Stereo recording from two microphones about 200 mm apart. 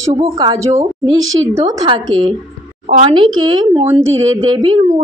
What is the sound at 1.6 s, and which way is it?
A woman's voice, 30° right (ahead or behind).